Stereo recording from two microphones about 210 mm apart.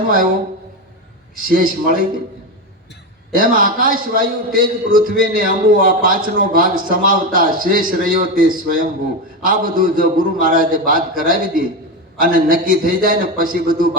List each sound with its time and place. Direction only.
1.4 s a man's voice: 40° right (ahead or behind)
3.3 s a man's voice: 40° right (ahead or behind)